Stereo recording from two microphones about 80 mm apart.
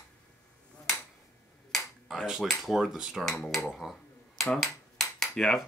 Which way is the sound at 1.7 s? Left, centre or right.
Centre.